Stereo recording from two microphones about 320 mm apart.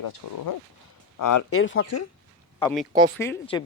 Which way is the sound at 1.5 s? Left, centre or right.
Left.